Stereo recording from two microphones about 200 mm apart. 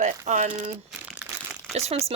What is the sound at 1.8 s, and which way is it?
Speech, 30° right (ahead or behind).